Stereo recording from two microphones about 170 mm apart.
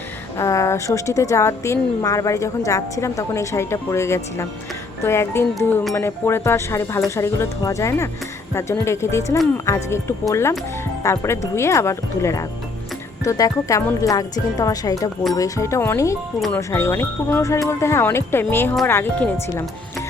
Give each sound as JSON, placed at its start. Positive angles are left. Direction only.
{"t": 0.3, "sound": "a woman's voice", "side_deg": 20}